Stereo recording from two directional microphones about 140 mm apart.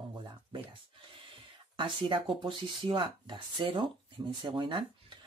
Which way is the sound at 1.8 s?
35° right (ahead or behind).